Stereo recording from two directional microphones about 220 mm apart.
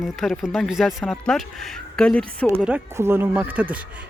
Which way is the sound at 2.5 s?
10° right (ahead or behind).